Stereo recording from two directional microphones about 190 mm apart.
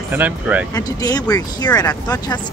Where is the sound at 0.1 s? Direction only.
10° right (ahead or behind).